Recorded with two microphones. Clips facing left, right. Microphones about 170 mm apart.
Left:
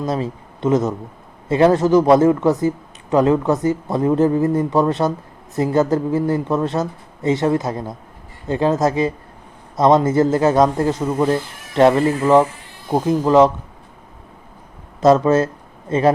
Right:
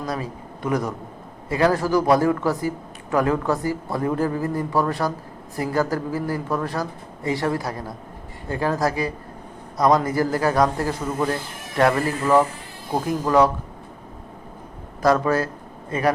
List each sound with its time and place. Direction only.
0.0 s a man's voice: 25° left (ahead or behind)
15.0 s a man's voice: 25° left (ahead or behind)